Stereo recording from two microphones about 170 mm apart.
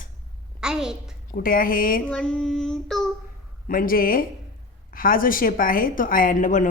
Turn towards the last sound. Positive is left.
turn(degrees=50)  # may be behind; listen again after turning